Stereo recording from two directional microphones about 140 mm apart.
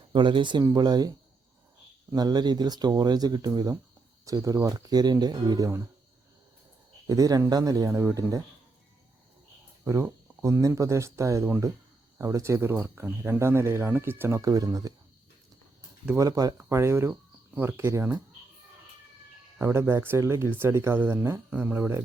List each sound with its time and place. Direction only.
0.1 s speech: 35° right (ahead or behind)
2.1 s speech: 30° right (ahead or behind)
7.1 s speech: 25° right (ahead or behind)
9.8 s speech: 20° right (ahead or behind)
16.1 s speech: 25° right (ahead or behind)
19.5 s speech: 20° right (ahead or behind)